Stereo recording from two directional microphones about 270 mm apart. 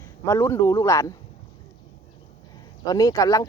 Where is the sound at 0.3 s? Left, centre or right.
Centre.